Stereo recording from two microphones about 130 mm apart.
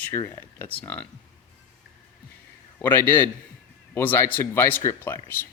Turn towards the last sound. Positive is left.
turn(degrees=15)  # may be behind; listen again after turning